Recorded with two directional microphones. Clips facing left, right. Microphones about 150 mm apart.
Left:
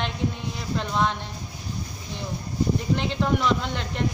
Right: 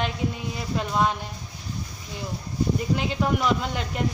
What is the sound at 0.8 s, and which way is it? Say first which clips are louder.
Speech: right 1 dB; 5° right (ahead or behind).